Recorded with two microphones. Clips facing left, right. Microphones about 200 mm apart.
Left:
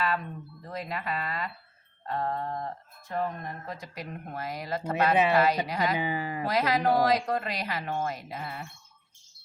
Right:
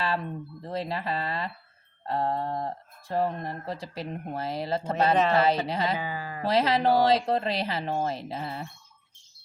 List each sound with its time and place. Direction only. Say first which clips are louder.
0.6 s speech: right 4 dB; 30° right (ahead or behind)
6.0 s speech: left 4 dB; 20° left (ahead or behind)
6.4 s speech: right 3 dB; 30° right (ahead or behind)